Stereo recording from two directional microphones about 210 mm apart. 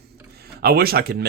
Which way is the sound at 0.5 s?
50° right (ahead or behind).